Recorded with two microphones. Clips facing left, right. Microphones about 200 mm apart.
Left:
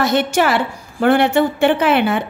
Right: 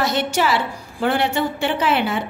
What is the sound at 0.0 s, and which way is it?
A woman's voice, 55° left (ahead or behind).